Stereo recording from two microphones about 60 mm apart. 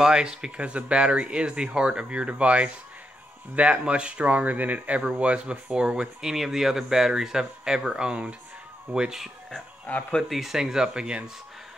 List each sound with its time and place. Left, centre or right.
0.0 s speech: centre
9.8 s speech: left
10.2 s speech: centre